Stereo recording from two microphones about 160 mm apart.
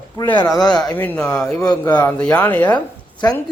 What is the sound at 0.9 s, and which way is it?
A man's voice, 10° left (ahead or behind).